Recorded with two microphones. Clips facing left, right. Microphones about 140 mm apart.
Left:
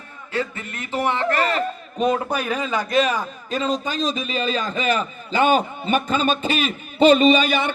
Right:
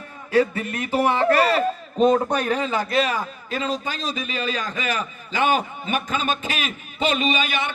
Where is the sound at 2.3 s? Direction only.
10° left (ahead or behind).